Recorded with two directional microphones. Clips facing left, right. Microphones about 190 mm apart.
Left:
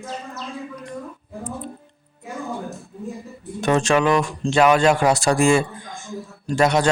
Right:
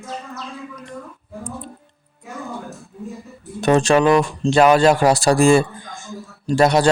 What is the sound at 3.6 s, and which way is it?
Speech, 35° right (ahead or behind).